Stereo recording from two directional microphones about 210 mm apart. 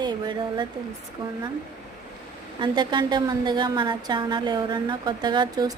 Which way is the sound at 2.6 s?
20° right (ahead or behind).